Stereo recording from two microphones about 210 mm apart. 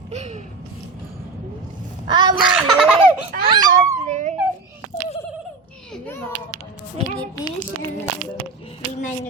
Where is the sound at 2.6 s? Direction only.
5° right (ahead or behind).